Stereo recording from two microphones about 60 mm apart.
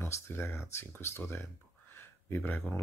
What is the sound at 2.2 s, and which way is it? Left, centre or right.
Speech, left.